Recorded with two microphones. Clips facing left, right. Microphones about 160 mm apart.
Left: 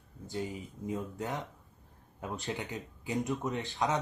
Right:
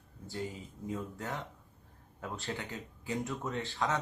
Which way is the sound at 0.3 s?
15° left (ahead or behind).